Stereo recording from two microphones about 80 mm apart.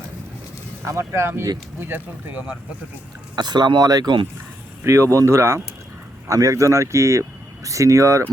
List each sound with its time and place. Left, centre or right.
0.9 s speech: right
3.3 s speech: right
4.8 s speech: right